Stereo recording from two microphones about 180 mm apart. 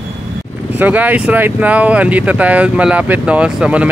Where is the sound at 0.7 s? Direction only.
10° right (ahead or behind).